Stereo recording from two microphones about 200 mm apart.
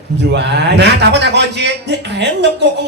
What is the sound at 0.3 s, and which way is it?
Speech, 60° right (ahead or behind).